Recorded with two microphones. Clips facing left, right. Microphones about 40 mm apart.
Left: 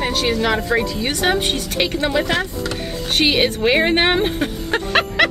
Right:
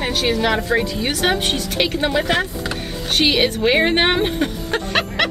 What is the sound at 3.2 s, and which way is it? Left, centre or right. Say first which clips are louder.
Speech: even; centre.